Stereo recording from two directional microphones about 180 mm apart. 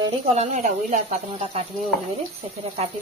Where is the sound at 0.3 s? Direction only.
35° right (ahead or behind).